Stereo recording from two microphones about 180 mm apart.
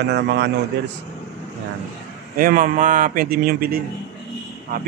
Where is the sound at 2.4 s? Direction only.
50° right (ahead or behind).